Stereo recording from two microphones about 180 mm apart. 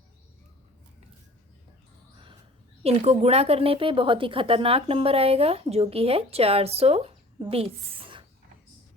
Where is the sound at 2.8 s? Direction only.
35° right (ahead or behind).